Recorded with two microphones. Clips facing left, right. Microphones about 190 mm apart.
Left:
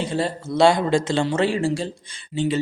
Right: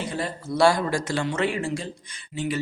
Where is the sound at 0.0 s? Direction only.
30° left (ahead or behind).